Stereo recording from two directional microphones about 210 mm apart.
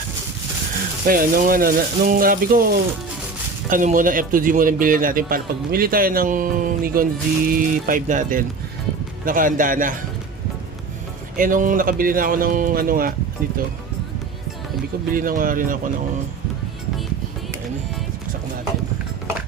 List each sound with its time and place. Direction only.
1.0 s a man's voice: 40° right (ahead or behind)
11.3 s a man's voice: 40° right (ahead or behind)
15.1 s a man's voice: 40° right (ahead or behind)